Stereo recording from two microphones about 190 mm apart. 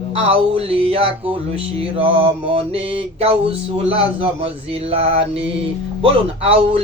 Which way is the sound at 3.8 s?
30° right (ahead or behind).